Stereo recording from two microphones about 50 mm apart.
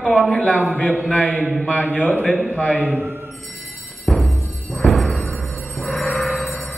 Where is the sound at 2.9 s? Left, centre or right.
Right.